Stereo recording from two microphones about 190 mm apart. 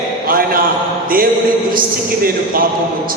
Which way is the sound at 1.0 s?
50° right (ahead or behind).